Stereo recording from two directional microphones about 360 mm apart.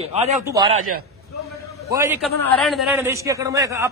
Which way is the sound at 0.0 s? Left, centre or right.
Centre.